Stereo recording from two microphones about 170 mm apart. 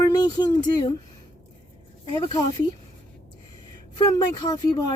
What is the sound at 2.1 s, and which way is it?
Speech, 25° left (ahead or behind).